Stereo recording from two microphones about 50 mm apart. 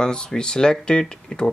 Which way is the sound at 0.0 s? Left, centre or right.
Centre.